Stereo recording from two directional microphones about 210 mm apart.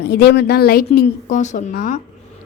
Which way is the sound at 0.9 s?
35° left (ahead or behind).